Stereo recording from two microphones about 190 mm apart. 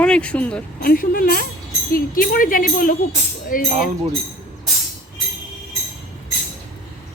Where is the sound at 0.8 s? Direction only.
50° left (ahead or behind).